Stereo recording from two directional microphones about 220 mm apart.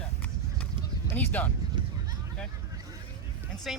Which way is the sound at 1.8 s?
20° right (ahead or behind).